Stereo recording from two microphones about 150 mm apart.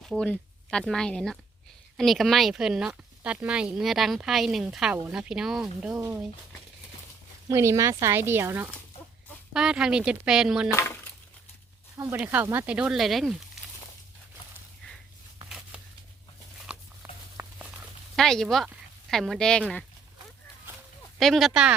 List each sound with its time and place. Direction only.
0.0 s speech: 5° left (ahead or behind)
6.0 s speech: 20° right (ahead or behind)
7.4 s speech: 20° right (ahead or behind)
9.5 s speech: 5° right (ahead or behind)
10.7 s speech: 20° left (ahead or behind)
11.9 s speech: 15° right (ahead or behind); by 13.3 s centre (ahead or behind)
15.4 s a sound: 5° right (ahead or behind)
16.7 s dog: 5° right (ahead or behind)
17.0 s a sound: 10° right (ahead or behind)
18.2 s speech: 5° left (ahead or behind)
21.2 s speech: centre (ahead or behind)